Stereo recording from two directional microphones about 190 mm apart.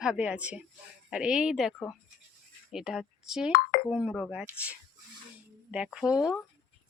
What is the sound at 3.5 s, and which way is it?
Speech, 50° left (ahead or behind).